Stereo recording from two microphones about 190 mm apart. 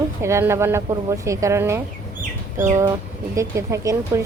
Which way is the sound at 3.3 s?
15° right (ahead or behind).